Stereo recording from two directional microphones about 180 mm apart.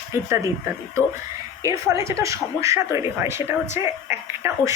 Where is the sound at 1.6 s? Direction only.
20° right (ahead or behind).